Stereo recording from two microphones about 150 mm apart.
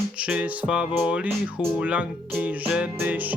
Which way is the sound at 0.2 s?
5° right (ahead or behind).